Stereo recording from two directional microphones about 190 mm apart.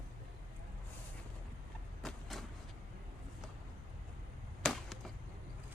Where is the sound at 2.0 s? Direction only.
Centre (ahead or behind).